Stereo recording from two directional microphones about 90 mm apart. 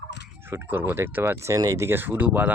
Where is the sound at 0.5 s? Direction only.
25° right (ahead or behind).